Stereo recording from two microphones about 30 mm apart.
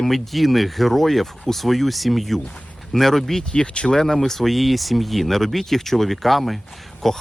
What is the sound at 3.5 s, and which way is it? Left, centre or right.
Speech, left.